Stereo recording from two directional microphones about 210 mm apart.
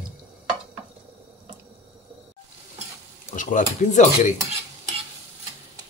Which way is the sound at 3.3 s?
40° left (ahead or behind).